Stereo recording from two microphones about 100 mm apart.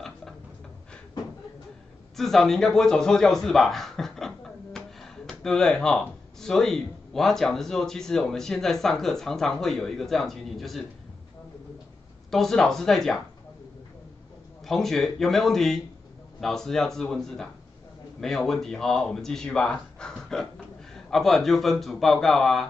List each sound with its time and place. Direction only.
2.1 s a sound: 5° left (ahead or behind)
5.4 s speech: 5° left (ahead or behind)
12.3 s speech: 5° left (ahead or behind)
14.7 s speech: 5° left (ahead or behind)